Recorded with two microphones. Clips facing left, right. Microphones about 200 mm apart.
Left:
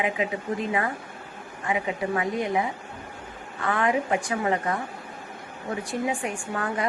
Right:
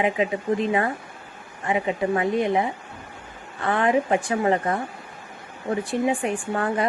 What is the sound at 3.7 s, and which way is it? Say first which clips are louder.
A woman's voice: right 4 dB; 30° right (ahead or behind).